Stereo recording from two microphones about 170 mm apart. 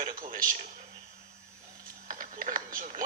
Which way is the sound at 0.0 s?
55° right (ahead or behind).